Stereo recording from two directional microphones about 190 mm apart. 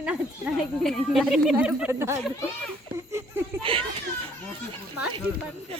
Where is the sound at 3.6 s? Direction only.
30° right (ahead or behind).